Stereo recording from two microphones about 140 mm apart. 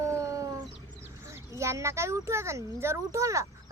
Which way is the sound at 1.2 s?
20° right (ahead or behind).